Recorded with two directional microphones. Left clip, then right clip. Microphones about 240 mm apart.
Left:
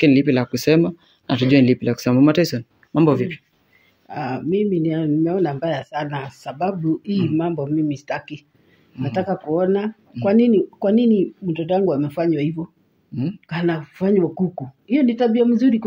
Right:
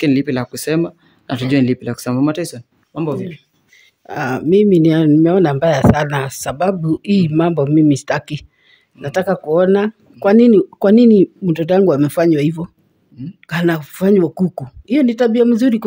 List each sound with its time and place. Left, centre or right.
0.0 s speech: centre; by 3.3 s left
4.1 s speech: right
13.1 s speech: centre
13.5 s speech: right